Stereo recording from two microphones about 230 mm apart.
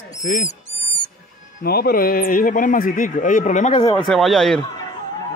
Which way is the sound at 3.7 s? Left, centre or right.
Centre.